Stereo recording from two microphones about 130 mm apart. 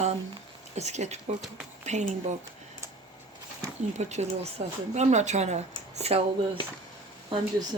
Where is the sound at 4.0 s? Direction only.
60° right (ahead or behind).